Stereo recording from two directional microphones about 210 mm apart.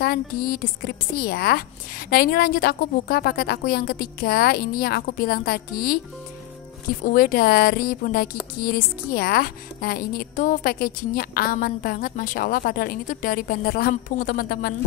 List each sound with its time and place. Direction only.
0.0 s a woman's voice: 45° left (ahead or behind)
7.1 s a woman's voice: 45° left (ahead or behind)